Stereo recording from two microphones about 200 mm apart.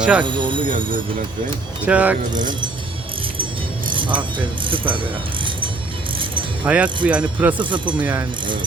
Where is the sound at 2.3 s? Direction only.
20° right (ahead or behind).